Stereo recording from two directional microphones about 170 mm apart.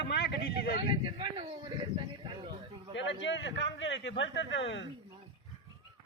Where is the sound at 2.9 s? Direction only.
90° left.